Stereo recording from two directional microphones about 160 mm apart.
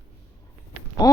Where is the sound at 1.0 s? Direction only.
25° left (ahead or behind).